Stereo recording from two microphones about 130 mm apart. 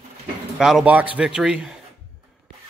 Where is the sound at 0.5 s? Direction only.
5° right (ahead or behind).